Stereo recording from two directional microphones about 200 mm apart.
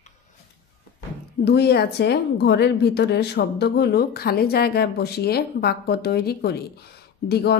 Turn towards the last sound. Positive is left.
turn(degrees=55)  # may be behind; listen again after turning